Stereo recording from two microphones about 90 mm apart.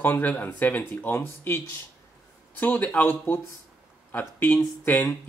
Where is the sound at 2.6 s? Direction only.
15° left (ahead or behind).